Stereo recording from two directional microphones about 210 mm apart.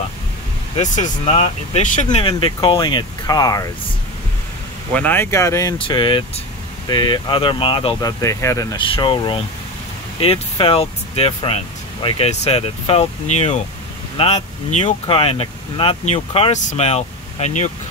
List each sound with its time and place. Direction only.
0.7 s speech: 35° left (ahead or behind); by 3.7 s 15° left (ahead or behind)
4.9 s speech: 10° left (ahead or behind); by 17.6 s 30° left (ahead or behind)